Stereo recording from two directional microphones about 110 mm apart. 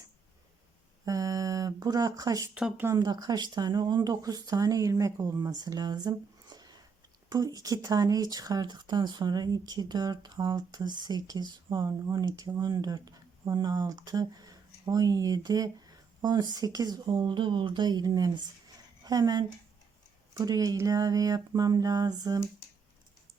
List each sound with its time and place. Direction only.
1.0 s a sound: 35° right (ahead or behind)
2.6 s speech: 10° right (ahead or behind)
3.0 s speech: 40° right (ahead or behind)
11.8 s speech: 30° right (ahead or behind)